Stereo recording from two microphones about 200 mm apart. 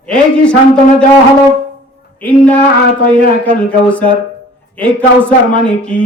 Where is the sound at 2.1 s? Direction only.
5° left (ahead or behind).